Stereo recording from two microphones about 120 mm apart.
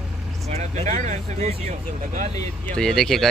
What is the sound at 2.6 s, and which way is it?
Speech, 5° left (ahead or behind).